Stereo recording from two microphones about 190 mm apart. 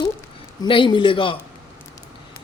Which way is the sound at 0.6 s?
25° left (ahead or behind).